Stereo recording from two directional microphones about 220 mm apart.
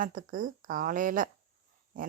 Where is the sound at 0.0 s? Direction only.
35° right (ahead or behind).